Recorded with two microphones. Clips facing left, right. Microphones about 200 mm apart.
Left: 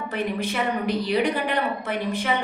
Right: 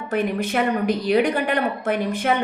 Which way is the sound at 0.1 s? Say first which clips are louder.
Right 6 dB; 45° right (ahead or behind).